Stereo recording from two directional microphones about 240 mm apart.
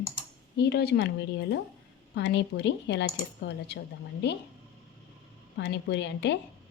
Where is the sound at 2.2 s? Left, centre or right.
Left.